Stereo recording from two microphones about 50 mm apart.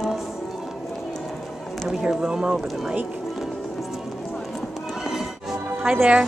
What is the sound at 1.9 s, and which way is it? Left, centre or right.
Speech, centre.